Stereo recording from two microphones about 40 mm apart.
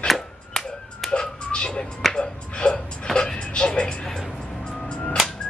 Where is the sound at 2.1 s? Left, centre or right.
Left.